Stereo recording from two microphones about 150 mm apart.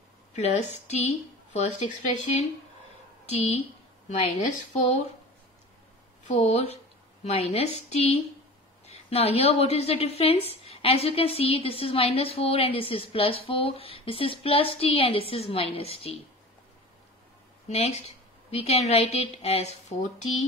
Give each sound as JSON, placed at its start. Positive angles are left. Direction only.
{"t": 0.3, "sound": "a woman's voice", "side_deg": 50}
{"t": 3.3, "sound": "a woman's voice", "side_deg": 40}
{"t": 4.1, "sound": "a woman's voice", "side_deg": 55}
{"t": 6.2, "sound": "a woman's voice", "side_deg": 45}
{"t": 7.9, "sound": "a woman's voice", "side_deg": 45}
{"t": 17.6, "sound": "a woman's voice", "side_deg": 45}